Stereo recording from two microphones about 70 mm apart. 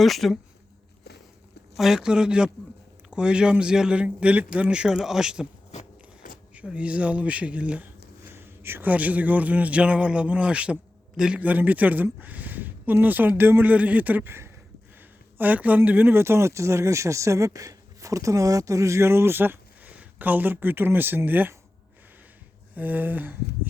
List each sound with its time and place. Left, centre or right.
0.0 s speech: centre
1.7 s a man's voice: centre
6.5 s a man's voice: centre
8.2 s a sound: right
8.9 s speech: right
15.4 s speech: right
22.7 s speech: right